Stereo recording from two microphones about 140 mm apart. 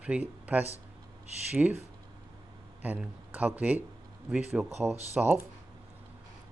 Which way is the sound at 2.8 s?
10° right (ahead or behind).